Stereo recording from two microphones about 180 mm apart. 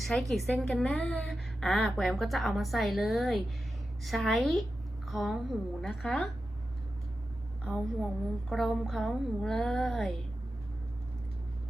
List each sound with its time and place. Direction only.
0.0 s a woman's voice: centre (ahead or behind)
8.4 s a woman's voice: centre (ahead or behind)